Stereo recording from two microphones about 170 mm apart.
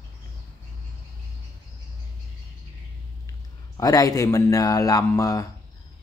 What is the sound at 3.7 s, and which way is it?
Speech, 20° left (ahead or behind).